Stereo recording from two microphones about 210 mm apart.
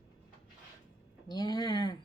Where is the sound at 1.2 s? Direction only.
20° left (ahead or behind).